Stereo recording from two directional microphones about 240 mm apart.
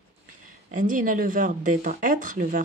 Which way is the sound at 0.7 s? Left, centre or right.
Right.